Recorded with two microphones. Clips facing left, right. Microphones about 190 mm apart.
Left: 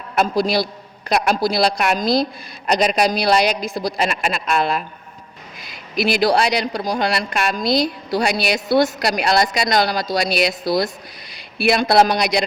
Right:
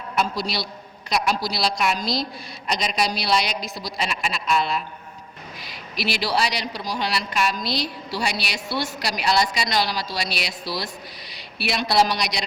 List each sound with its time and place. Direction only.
0.2 s a woman's voice: 50° left (ahead or behind)
6.0 s a woman's voice: 50° left (ahead or behind)